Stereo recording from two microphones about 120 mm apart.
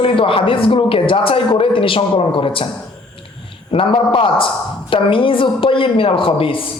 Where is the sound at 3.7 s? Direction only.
45° left (ahead or behind).